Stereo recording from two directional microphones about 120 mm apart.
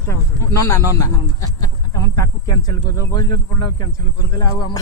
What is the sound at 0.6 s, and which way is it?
Speech, 25° left (ahead or behind).